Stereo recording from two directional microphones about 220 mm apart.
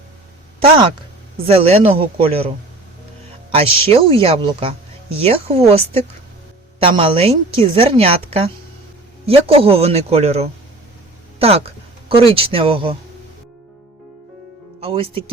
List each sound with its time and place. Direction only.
1.5 s a woman's voice: 25° right (ahead or behind)
3.5 s a woman's voice: 25° right (ahead or behind)
11.3 s a sound: 25° right (ahead or behind)
12.3 s a woman's voice: 25° right (ahead or behind)
14.8 s speech: 25° right (ahead or behind)